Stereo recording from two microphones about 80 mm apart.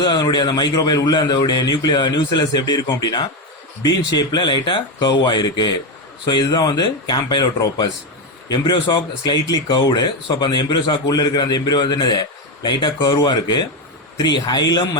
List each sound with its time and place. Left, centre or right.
0.0 s a man's voice: left
8.4 s a man's voice: left